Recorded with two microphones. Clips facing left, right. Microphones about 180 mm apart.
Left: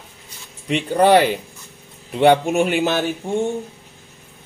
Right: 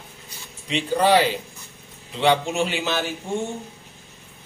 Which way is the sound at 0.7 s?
55° left (ahead or behind).